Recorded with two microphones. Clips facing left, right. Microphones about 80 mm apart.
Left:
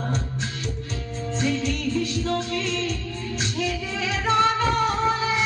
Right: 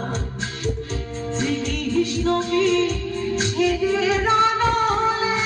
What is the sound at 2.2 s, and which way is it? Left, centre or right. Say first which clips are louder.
Music: right 7 dB; right.